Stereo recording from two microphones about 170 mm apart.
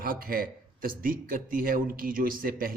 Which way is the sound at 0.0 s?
55° right (ahead or behind).